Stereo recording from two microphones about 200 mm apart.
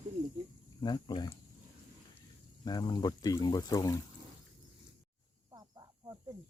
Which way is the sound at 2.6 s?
20° left (ahead or behind).